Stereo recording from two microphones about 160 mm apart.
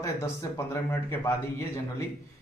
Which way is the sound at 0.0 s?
20° left (ahead or behind).